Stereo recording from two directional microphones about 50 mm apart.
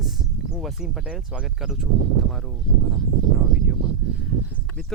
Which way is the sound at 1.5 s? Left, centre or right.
Centre.